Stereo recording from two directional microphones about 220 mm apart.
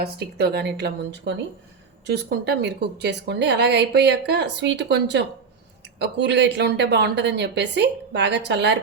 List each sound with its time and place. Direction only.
0.0 s a woman's voice: 45° right (ahead or behind)